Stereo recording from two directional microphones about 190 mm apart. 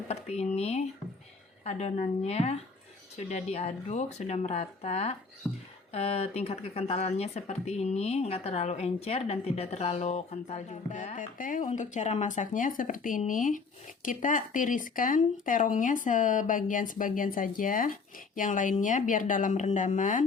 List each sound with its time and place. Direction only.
0.1 s speech: 35° left (ahead or behind)
5.5 s speech: centre (ahead or behind)
5.9 s speech: 35° left (ahead or behind)